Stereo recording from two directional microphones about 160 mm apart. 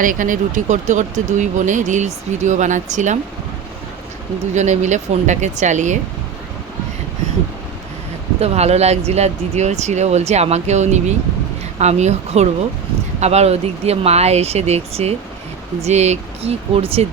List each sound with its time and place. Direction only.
0.0 s speech: 55° right (ahead or behind)
4.5 s speech: 45° right (ahead or behind)
8.4 s speech: 40° right (ahead or behind)